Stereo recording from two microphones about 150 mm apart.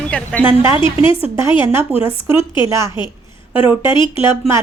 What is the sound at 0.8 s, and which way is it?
Speech, 35° left (ahead or behind).